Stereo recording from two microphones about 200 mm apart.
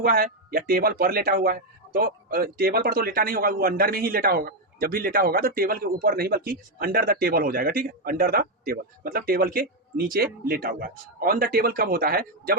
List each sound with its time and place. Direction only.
0.0 s speech: 45° right (ahead or behind)